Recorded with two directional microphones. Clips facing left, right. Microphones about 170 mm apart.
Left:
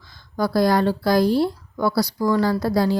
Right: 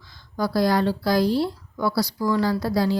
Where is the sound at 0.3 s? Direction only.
50° left (ahead or behind).